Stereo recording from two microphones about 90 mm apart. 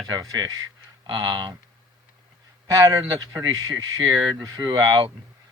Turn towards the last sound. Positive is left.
turn(degrees=-50)  # may be behind; listen again after turning